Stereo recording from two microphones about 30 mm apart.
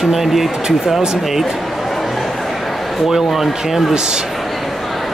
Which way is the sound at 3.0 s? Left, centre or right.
Centre.